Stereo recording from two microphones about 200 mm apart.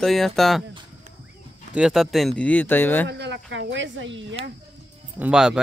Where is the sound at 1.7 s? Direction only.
5° right (ahead or behind).